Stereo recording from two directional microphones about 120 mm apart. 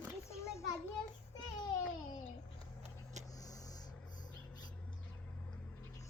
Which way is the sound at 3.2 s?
30° left (ahead or behind).